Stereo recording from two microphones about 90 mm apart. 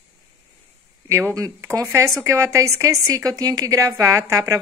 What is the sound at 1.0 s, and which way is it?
A woman's voice, 35° right (ahead or behind).